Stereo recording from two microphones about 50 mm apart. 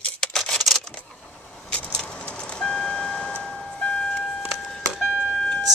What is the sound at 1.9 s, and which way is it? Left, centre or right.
Bird, centre.